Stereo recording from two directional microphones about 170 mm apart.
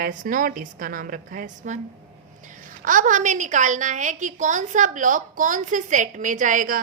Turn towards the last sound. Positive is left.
turn(degrees=-50)  # may be behind; listen again after turning